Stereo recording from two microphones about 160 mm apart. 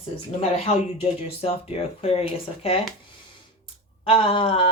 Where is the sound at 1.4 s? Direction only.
35° left (ahead or behind).